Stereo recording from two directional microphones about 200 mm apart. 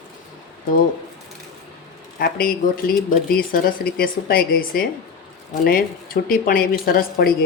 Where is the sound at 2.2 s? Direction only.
45° left (ahead or behind).